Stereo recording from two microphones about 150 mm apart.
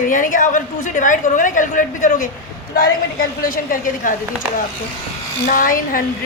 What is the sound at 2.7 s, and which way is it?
A woman's voice, 75° left (ahead or behind).